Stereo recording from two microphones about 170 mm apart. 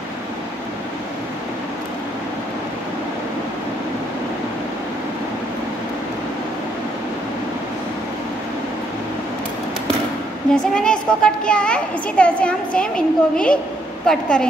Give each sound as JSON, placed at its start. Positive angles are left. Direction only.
{"t": 10.5, "sound": "a child's voice", "side_deg": 5}